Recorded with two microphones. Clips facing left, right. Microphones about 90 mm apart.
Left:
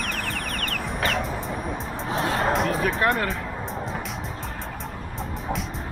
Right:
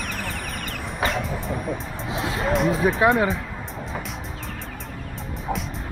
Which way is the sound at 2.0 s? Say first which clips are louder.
Left 3 dB; 35° left (ahead or behind).